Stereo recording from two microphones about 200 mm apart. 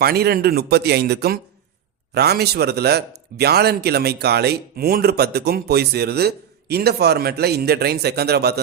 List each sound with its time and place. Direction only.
0.0 s a man's voice: 50° right (ahead or behind)